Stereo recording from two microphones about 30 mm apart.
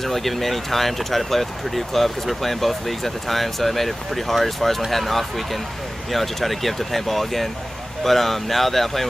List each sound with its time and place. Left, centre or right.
0.0 s speech: centre